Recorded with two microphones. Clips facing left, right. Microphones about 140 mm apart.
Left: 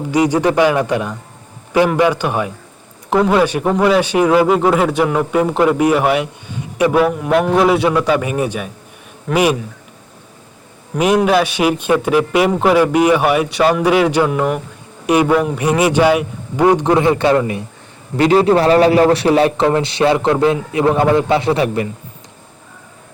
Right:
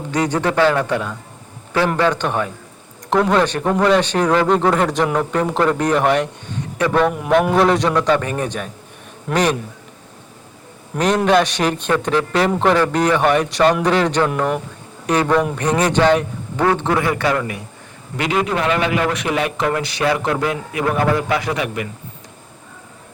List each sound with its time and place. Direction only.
0.1 s speech: 10° left (ahead or behind)
7.1 s speech: centre (ahead or behind)
10.9 s a man's voice: 10° left (ahead or behind); by 21.8 s 30° left (ahead or behind)